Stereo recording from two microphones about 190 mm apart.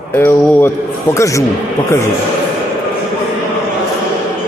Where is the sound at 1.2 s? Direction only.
15° left (ahead or behind).